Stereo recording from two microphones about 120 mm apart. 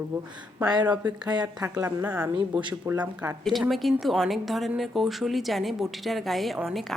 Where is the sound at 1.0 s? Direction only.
35° right (ahead or behind).